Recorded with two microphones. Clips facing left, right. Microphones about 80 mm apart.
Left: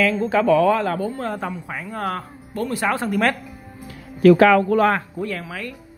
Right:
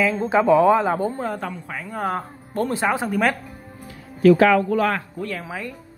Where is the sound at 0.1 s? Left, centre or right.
Right.